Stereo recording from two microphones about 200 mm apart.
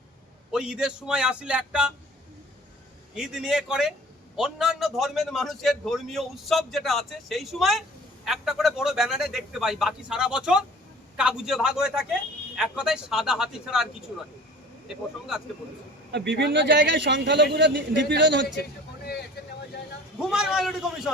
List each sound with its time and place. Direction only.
0.5 s a man's voice: 5° right (ahead or behind)
3.2 s a man's voice: 5° right (ahead or behind)
16.1 s a man's voice: 60° right (ahead or behind)
20.1 s a man's voice: 5° right (ahead or behind)